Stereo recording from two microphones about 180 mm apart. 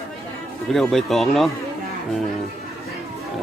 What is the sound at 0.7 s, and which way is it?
Speech, centre (ahead or behind).